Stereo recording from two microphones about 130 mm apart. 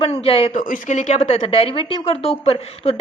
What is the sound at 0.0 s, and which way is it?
Speech, 45° left (ahead or behind).